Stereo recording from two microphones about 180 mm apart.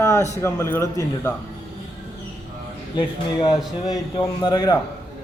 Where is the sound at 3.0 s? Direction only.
30° left (ahead or behind).